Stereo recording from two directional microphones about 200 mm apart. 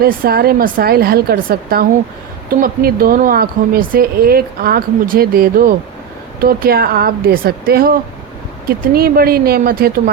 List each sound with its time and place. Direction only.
0.0 s speech: 50° right (ahead or behind)